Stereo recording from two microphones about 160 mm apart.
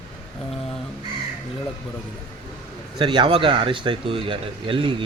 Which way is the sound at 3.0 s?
30° right (ahead or behind).